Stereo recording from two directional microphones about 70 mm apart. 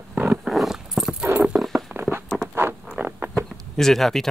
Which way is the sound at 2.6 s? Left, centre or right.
Right.